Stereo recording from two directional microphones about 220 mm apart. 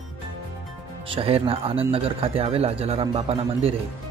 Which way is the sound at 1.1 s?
25° right (ahead or behind).